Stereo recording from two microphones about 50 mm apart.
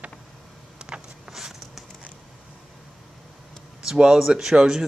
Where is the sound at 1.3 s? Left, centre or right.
Centre.